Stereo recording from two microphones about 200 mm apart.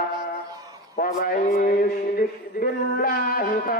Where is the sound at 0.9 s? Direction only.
45° left (ahead or behind).